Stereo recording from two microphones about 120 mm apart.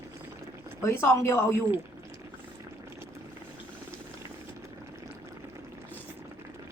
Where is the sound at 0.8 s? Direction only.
20° left (ahead or behind).